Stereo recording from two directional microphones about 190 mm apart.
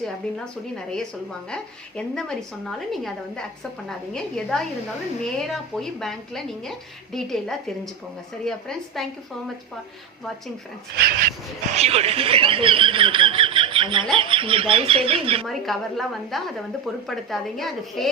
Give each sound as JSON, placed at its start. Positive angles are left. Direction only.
{"t": 0.0, "sound": "a woman's voice", "side_deg": 5}
{"t": 10.9, "sound": "speech", "side_deg": -55}
{"t": 11.7, "sound": "speech", "side_deg": -35}
{"t": 15.4, "sound": "a woman's voice", "side_deg": 0}